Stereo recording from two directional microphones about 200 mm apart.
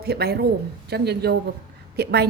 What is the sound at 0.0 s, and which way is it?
A woman's voice, 50° right (ahead or behind).